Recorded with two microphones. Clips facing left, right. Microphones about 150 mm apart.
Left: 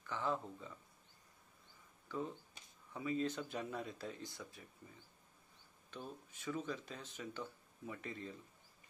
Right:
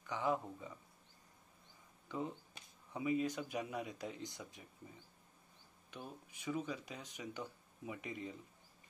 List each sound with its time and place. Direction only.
0.0 s speech: 15° right (ahead or behind)
2.0 s speech: 20° right (ahead or behind)
5.9 s speech: 15° right (ahead or behind)